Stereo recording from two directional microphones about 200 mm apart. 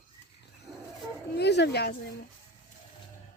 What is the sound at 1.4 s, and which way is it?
Speech, 55° left (ahead or behind).